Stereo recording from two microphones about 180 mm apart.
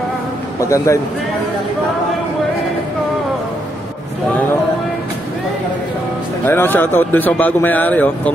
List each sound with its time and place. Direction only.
0.6 s speech: 15° left (ahead or behind)
6.4 s speech: 10° left (ahead or behind)